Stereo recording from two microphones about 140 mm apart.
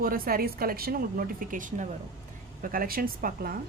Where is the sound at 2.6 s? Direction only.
90° right.